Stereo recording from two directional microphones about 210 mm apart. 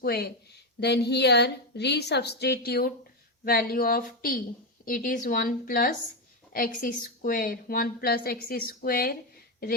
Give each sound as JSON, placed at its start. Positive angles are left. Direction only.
{"t": 0.0, "sound": "a woman's voice", "side_deg": 50}